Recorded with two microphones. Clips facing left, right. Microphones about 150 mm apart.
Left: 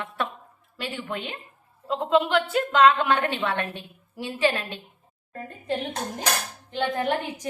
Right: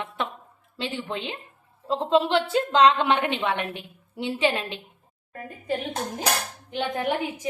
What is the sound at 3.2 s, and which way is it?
A woman's voice, 15° right (ahead or behind).